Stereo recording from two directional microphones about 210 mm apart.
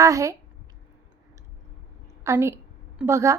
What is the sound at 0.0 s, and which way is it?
Speech, 15° right (ahead or behind).